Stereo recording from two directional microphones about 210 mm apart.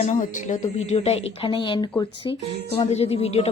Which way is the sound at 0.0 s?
35° left (ahead or behind).